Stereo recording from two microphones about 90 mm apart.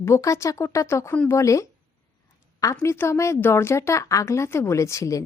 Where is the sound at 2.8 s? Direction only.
30° left (ahead or behind).